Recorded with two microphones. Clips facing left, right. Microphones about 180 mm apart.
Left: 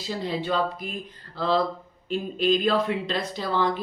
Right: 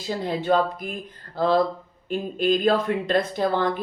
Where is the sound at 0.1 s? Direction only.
50° right (ahead or behind).